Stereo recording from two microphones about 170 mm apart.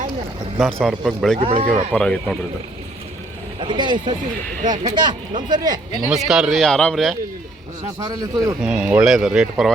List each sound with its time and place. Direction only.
0.6 s a man's voice: centre (ahead or behind)
1.4 s speech: 35° right (ahead or behind)
1.7 s a man's voice: centre (ahead or behind)
3.6 s speech: 30° right (ahead or behind)
6.1 s a man's voice: centre (ahead or behind)
7.9 s speech: 20° right (ahead or behind)
8.6 s a man's voice: 5° right (ahead or behind)